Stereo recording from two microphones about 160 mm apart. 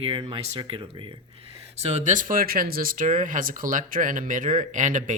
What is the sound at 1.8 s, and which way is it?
Speech, 45° right (ahead or behind).